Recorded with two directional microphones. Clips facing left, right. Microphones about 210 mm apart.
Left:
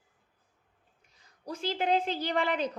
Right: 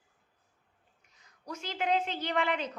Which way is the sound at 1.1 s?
30° left (ahead or behind).